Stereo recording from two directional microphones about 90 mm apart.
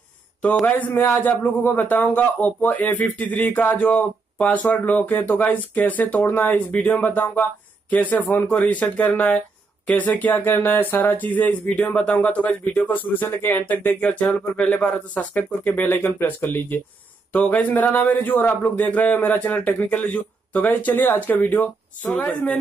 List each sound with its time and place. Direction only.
0.7 s a man's voice: 20° left (ahead or behind)